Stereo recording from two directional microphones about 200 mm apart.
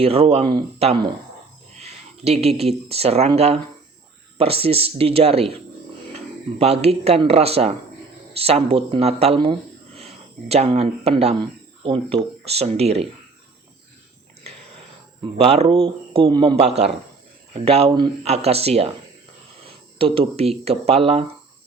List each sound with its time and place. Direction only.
0.0 s speech: 30° right (ahead or behind)
15.2 s speech: 30° right (ahead or behind)